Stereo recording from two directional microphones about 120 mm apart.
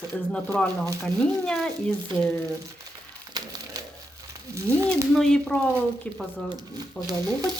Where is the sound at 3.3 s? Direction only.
35° right (ahead or behind).